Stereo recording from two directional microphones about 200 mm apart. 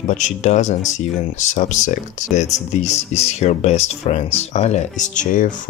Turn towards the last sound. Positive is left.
turn(degrees=40)  # may be behind; listen again after turning